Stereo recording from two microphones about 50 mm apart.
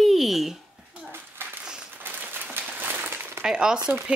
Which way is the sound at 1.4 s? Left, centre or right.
Right.